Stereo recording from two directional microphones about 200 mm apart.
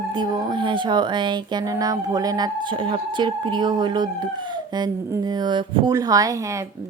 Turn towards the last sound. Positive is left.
turn(degrees=-15)  # may be behind; listen again after turning